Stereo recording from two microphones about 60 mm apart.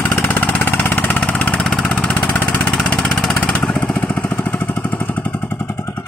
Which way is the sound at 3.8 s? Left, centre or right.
Centre.